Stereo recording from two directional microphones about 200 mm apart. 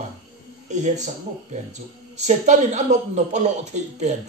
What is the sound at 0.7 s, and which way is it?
Speech, 35° right (ahead or behind).